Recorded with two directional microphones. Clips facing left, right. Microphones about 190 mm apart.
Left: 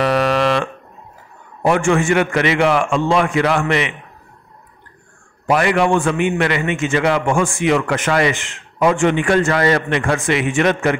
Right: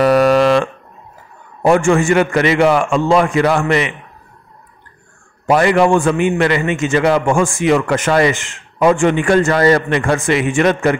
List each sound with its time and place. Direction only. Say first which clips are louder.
0.0 s a sound: right 5 dB; 40° right (ahead or behind)
1.6 s a man's voice: right 3 dB; 40° right (ahead or behind)
5.5 s a man's voice: right 3 dB; 35° right (ahead or behind)